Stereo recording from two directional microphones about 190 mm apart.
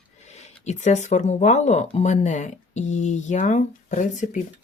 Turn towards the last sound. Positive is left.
turn(degrees=40)  # may be behind; listen again after turning